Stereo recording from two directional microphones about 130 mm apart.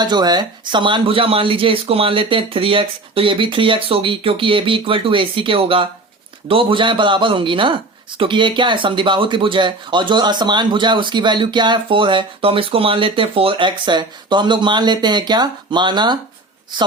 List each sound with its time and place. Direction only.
0.0 s speech: 30° right (ahead or behind)